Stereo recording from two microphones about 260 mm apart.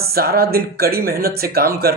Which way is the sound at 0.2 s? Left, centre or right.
Right.